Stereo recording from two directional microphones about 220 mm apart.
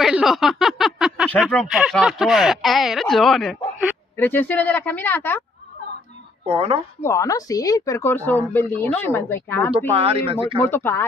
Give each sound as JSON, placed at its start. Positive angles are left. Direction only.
{"t": 0.0, "sound": "a woman's voice", "side_deg": 0}
{"t": 6.4, "sound": "speech", "side_deg": -25}
{"t": 7.0, "sound": "a woman's voice", "side_deg": 15}
{"t": 9.8, "sound": "speech", "side_deg": -25}
{"t": 10.6, "sound": "a woman's voice", "side_deg": 10}